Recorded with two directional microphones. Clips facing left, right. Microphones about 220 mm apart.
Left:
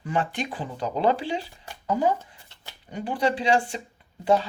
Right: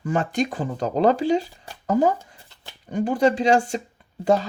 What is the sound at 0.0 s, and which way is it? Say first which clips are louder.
Speech: right 5 dB; 45° right (ahead or behind).